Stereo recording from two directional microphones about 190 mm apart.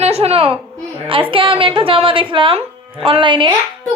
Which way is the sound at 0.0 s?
35° right (ahead or behind).